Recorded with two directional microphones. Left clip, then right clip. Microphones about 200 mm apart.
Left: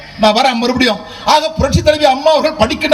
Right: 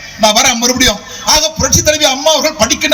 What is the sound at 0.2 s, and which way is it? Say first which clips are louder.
A man's voice: right 1 dB; 40° left (ahead or behind).